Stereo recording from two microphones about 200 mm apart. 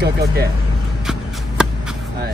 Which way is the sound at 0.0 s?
55° right (ahead or behind).